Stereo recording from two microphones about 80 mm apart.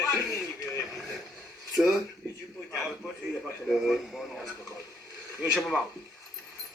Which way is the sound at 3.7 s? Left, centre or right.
Centre.